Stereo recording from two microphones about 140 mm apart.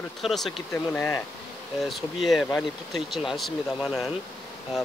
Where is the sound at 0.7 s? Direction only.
20° left (ahead or behind).